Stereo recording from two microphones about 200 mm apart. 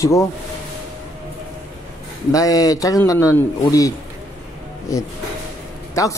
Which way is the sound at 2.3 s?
20° left (ahead or behind).